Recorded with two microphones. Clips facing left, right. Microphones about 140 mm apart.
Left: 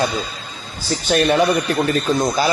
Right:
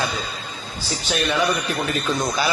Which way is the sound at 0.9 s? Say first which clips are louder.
Left 7 dB; 55° left (ahead or behind).